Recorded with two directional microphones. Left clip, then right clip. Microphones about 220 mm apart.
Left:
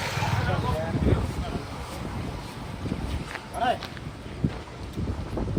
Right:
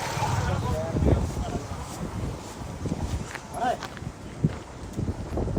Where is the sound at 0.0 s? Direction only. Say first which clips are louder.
Even; 25° right (ahead or behind).